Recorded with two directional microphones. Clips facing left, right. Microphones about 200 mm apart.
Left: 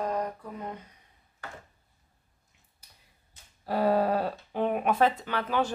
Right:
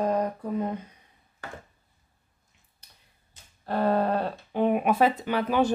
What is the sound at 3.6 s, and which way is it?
Speech, 5° left (ahead or behind).